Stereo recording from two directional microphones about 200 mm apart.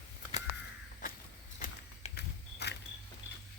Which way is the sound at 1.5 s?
40° left (ahead or behind).